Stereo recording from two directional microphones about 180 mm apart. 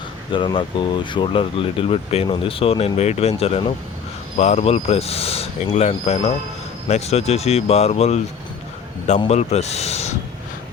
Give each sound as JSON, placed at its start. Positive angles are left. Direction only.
{"t": 0.3, "sound": "speech", "side_deg": 25}